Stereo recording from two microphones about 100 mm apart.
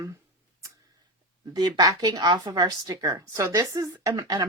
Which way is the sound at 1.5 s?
45° right (ahead or behind).